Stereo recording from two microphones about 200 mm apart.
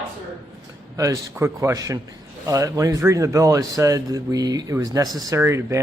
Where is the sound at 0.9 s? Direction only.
15° right (ahead or behind).